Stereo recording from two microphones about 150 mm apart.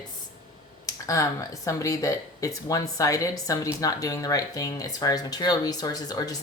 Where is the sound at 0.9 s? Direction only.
20° left (ahead or behind).